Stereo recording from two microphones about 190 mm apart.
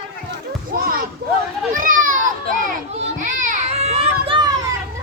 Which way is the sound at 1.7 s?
45° right (ahead or behind).